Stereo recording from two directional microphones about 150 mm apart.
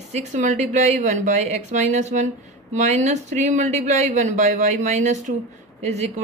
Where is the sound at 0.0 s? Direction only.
50° right (ahead or behind).